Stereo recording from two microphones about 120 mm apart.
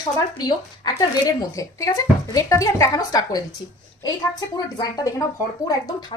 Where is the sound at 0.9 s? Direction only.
30° left (ahead or behind).